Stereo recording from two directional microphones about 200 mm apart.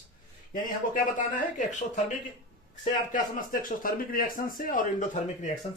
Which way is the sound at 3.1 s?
40° left (ahead or behind).